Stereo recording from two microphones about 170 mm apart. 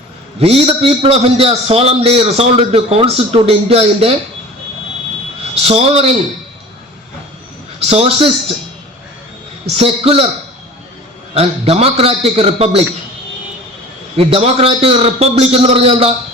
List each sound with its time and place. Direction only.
0.3 s a man's voice: 35° right (ahead or behind)
5.6 s a man's voice: 35° right (ahead or behind)
7.8 s a man's voice: 35° right (ahead or behind)
9.7 s a man's voice: 35° right (ahead or behind)
11.3 s a man's voice: 35° right (ahead or behind)
14.2 s a man's voice: 35° right (ahead or behind)